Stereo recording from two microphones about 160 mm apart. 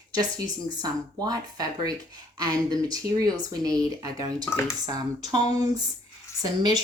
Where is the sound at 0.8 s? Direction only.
25° right (ahead or behind).